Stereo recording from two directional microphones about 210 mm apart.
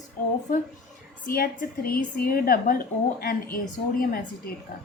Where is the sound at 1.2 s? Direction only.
40° left (ahead or behind).